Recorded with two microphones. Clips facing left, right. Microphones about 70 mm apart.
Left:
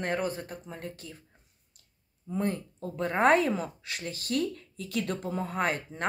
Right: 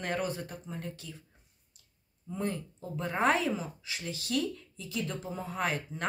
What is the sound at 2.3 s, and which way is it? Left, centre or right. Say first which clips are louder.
Speech: left 4 dB; left.